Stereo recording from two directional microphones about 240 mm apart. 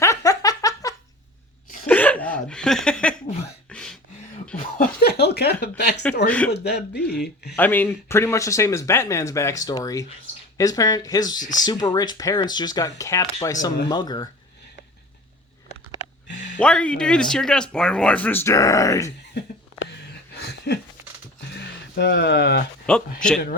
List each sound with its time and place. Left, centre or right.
0.0 s giggle: centre
1.9 s speech: centre
3.7 s a sound: centre
4.8 s speech: left
6.2 s speech: centre
6.5 s speech: left
7.5 s speech: centre
16.3 s a sound: left
16.6 s speech: centre
20.7 s speech: left
21.9 s speech: left
22.9 s speech: centre